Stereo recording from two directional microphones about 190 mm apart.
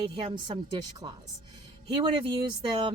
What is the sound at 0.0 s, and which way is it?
Speech, 25° right (ahead or behind).